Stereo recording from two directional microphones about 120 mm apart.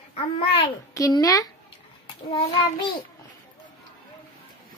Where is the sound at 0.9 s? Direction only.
30° left (ahead or behind).